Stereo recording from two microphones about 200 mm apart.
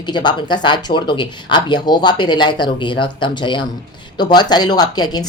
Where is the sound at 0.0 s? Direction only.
20° left (ahead or behind).